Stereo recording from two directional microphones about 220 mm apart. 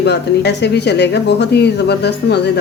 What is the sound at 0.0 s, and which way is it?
Speech, 50° left (ahead or behind).